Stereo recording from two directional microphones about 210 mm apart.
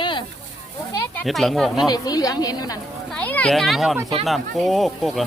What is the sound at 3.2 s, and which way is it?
Speech, 5° left (ahead or behind).